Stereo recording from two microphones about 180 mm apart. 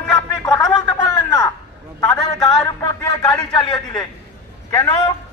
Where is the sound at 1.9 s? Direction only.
15° left (ahead or behind).